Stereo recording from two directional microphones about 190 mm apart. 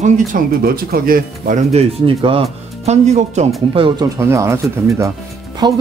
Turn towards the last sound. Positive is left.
turn(degrees=-20)  # may be behind; listen again after turning